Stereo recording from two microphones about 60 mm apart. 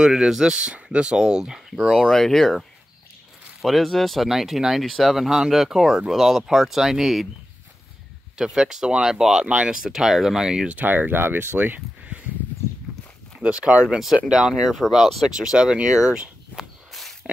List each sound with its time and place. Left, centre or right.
0.0 s speech: centre
3.6 s speech: centre
8.4 s speech: centre
10.8 s speech: right
12.0 s a sound: right
13.4 s speech: centre
16.9 s a sound: centre